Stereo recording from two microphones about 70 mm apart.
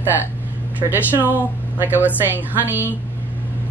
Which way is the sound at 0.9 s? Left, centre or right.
Right.